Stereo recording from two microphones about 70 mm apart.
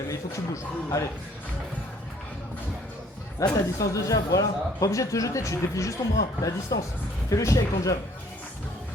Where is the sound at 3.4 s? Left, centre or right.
Left.